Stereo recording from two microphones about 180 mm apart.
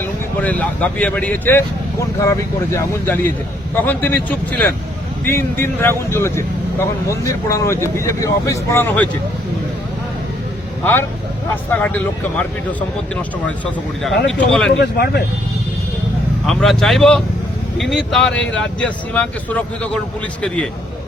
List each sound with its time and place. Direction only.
0.0 s speech: 10° left (ahead or behind)
11.7 s speech: 10° left (ahead or behind)
14.3 s speech: 5° left (ahead or behind)
14.8 s speech: 60° left (ahead or behind)
16.5 s speech: centre (ahead or behind)